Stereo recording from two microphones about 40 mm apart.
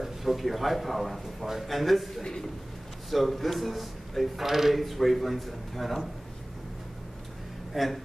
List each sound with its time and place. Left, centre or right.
0.0 s a man's voice: centre
7.7 s speech: centre